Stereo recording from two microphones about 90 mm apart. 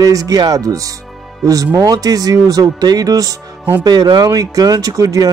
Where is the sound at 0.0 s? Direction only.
40° right (ahead or behind).